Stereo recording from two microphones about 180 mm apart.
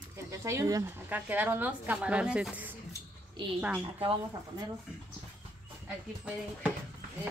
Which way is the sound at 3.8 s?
30° right (ahead or behind).